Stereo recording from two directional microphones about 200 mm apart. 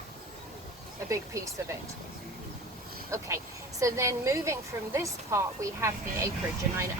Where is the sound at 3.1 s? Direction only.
15° right (ahead or behind).